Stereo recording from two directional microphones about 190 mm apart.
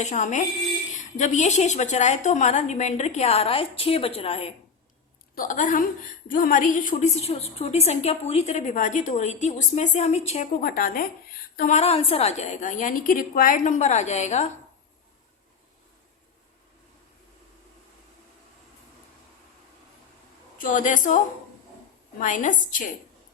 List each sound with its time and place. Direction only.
0.0 s a woman's voice: 40° left (ahead or behind)
5.3 s a woman's voice: 45° left (ahead or behind)
10.6 s a woman's voice: 50° left (ahead or behind)
20.6 s a woman's voice: 45° left (ahead or behind)
22.2 s a woman's voice: 40° left (ahead or behind)